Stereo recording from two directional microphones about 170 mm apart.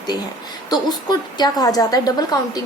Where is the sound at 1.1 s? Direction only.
25° left (ahead or behind).